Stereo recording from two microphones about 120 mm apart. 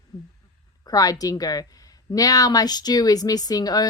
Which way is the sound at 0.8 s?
30° left (ahead or behind).